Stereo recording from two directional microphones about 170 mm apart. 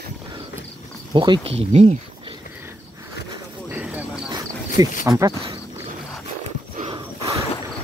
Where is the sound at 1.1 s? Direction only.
25° right (ahead or behind).